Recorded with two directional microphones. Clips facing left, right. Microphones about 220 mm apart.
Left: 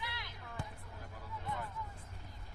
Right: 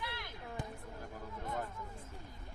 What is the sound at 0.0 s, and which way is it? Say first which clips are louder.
Music: right 3 dB; 50° right (ahead or behind).